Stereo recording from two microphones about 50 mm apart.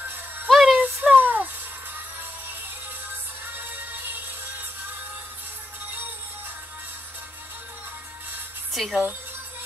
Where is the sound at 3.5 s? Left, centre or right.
Right.